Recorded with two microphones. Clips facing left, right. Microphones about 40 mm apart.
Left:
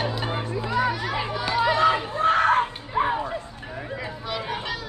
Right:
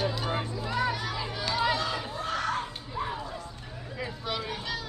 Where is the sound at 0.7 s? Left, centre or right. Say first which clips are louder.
Left 5 dB; centre.